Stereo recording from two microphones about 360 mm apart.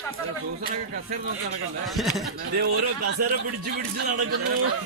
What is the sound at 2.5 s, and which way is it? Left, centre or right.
Speech, right.